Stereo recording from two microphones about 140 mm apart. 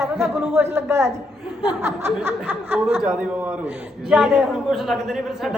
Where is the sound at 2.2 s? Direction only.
15° right (ahead or behind).